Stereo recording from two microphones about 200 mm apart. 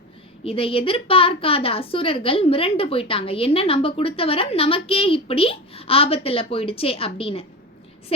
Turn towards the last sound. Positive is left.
turn(degrees=25)  # may be behind; listen again after turning